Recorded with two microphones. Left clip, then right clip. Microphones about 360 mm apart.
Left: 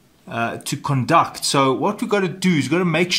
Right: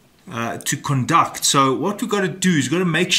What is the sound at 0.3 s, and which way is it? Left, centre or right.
Speech, centre.